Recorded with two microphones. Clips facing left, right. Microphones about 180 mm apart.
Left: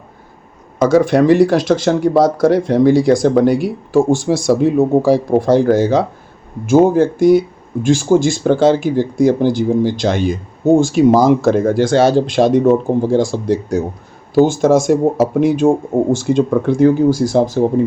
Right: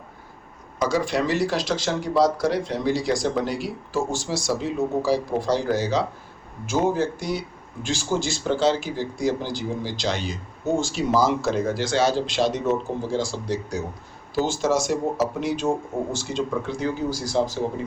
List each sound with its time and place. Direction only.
0.8 s speech: 55° left (ahead or behind)